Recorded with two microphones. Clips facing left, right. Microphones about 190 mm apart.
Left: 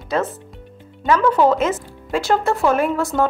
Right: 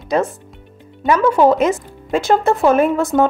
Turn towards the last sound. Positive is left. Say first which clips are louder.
# right 4 dB
turn(degrees=-20)  # may be behind; listen again after turning